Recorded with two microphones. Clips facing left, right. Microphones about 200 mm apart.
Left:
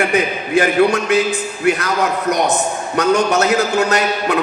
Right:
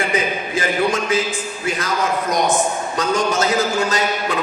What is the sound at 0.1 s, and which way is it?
A man's voice, 65° left (ahead or behind).